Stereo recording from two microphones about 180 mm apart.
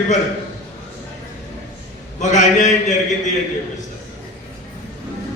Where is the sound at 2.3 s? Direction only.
40° left (ahead or behind).